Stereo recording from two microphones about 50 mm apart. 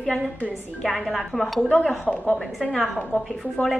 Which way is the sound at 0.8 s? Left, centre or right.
Centre.